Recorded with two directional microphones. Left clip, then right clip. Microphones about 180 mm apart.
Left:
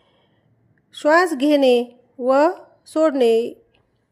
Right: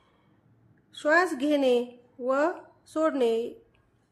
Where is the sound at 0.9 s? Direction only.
35° left (ahead or behind).